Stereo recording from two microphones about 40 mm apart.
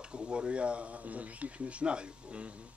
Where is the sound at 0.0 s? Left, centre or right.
Right.